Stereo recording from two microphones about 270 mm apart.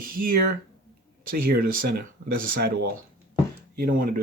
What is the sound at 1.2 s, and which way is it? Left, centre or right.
Speech, right.